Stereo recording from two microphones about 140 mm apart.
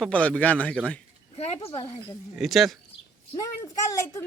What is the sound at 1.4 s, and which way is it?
Speech, 45° left (ahead or behind).